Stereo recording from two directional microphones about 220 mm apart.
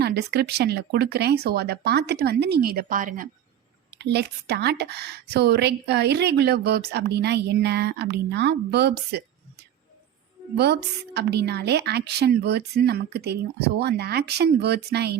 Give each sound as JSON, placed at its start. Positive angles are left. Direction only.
{"t": 0.0, "sound": "a woman's voice", "side_deg": -50}
{"t": 3.9, "sound": "a woman's voice", "side_deg": -50}